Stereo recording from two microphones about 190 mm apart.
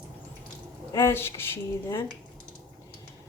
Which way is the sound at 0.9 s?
15° left (ahead or behind).